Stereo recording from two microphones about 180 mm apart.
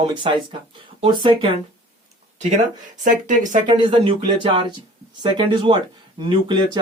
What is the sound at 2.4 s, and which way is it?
Speech, 40° right (ahead or behind).